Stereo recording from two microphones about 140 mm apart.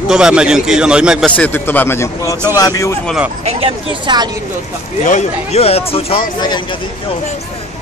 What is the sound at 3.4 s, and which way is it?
Speech, 40° right (ahead or behind).